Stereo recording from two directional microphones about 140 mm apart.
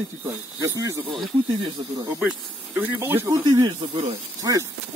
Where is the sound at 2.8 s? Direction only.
15° right (ahead or behind).